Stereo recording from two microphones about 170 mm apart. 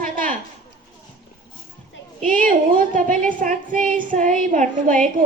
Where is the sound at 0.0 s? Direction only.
50° right (ahead or behind).